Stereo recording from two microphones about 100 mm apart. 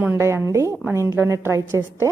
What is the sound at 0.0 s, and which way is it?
A woman's voice, 25° right (ahead or behind).